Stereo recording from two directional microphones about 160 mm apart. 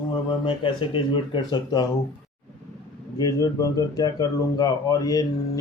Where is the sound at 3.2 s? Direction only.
25° left (ahead or behind).